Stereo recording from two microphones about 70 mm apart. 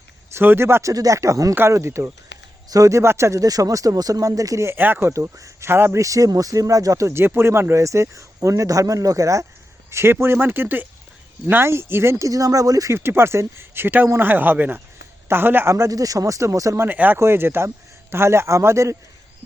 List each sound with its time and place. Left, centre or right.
0.3 s speech: right
0.9 s speech: right
2.6 s speech: right
3.4 s speech: right
4.8 s speech: right
5.0 s speech: right
6.0 s speech: right
9.9 s speech: right
12.3 s speech: right
12.9 s speech: right
15.9 s speech: right
16.7 s speech: right
17.2 s speech: right